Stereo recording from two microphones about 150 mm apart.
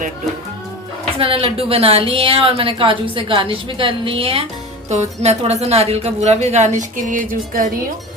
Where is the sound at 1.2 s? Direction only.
40° right (ahead or behind).